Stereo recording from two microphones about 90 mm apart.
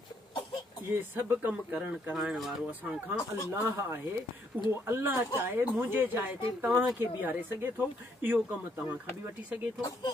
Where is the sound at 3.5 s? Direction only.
30° right (ahead or behind).